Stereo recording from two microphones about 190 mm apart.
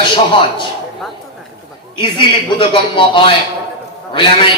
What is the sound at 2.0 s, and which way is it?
A man's voice, 25° left (ahead or behind).